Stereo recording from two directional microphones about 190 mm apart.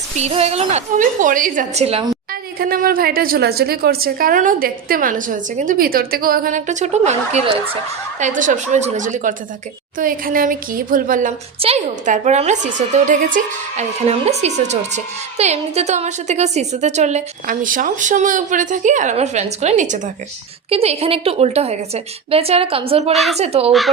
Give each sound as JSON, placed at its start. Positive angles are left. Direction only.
{"t": 0.2, "sound": "a woman's voice", "side_deg": -35}
{"t": 2.6, "sound": "a woman's voice", "side_deg": -50}
{"t": 8.2, "sound": "a woman's voice", "side_deg": -45}
{"t": 23.1, "sound": "a woman's voice", "side_deg": 0}
{"t": 23.4, "sound": "a woman's voice", "side_deg": -30}